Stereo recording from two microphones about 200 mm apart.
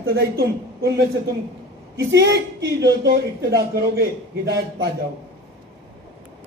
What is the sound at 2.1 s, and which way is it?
Speech, 60° right (ahead or behind).